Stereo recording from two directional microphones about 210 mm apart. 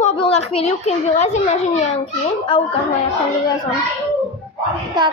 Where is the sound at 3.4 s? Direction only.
20° left (ahead or behind).